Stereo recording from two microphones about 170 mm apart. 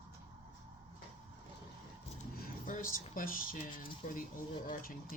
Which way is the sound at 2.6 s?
50° left (ahead or behind).